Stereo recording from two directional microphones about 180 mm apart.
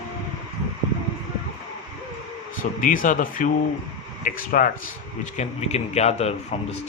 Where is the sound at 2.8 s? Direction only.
50° left (ahead or behind).